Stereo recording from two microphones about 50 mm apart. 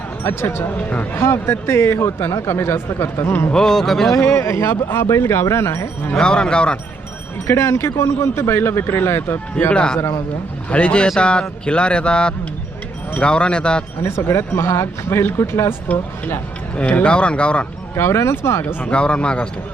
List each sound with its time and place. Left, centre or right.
0.3 s speech: left
0.8 s speech: left
1.1 s speech: left
3.5 s speech: centre
4.2 s speech: left
4.7 s speech: left
5.0 s speech: left
6.1 s speech: centre
7.4 s speech: left
9.7 s speech: centre
14.0 s speech: left
16.9 s speech: left
17.9 s speech: left
18.9 s speech: left